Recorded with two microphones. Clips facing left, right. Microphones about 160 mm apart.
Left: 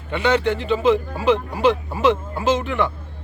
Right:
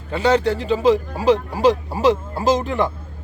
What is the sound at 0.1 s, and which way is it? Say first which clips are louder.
Speech: right 2 dB; 35° right (ahead or behind).